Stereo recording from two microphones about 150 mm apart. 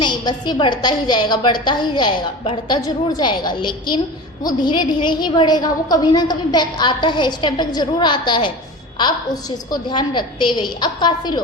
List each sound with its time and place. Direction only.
0.0 s a woman's voice: 30° left (ahead or behind)